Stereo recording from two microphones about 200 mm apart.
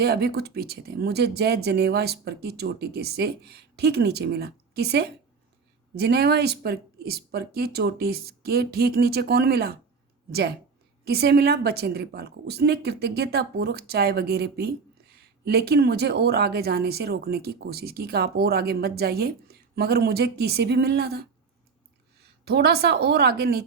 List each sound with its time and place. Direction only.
0.0 s a woman's voice: 55° right (ahead or behind)
11.0 s a woman's voice: 55° right (ahead or behind)
22.4 s a woman's voice: 55° right (ahead or behind)